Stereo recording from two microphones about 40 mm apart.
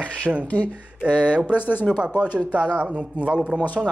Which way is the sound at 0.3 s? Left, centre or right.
Right.